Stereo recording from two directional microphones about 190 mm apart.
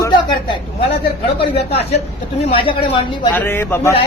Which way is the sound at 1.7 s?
30° left (ahead or behind).